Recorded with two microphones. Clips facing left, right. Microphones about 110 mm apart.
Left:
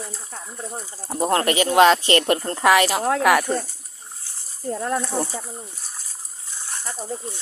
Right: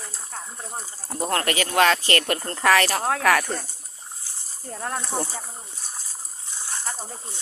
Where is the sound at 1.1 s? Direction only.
25° left (ahead or behind).